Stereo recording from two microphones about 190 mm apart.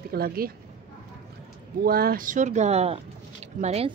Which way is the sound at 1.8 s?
50° right (ahead or behind).